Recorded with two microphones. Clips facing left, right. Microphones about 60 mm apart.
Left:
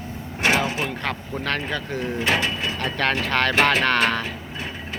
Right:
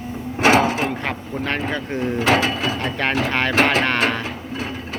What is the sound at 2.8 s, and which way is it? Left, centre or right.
Speech, centre.